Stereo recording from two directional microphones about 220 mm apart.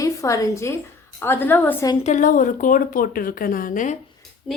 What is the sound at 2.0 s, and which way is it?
Speech, 35° left (ahead or behind).